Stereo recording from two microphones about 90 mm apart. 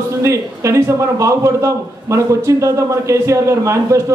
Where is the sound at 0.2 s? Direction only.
30° right (ahead or behind).